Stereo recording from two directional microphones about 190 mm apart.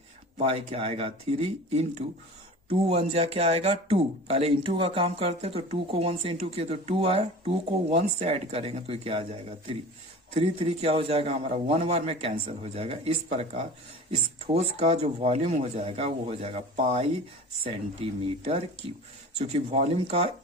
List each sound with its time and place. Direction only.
0.3 s speech: 35° right (ahead or behind)